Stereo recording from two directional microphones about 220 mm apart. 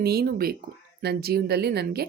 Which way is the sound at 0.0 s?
45° right (ahead or behind).